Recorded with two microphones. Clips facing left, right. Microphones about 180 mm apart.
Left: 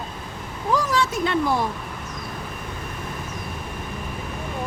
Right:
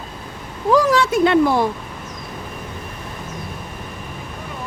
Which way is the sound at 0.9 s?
70° right (ahead or behind).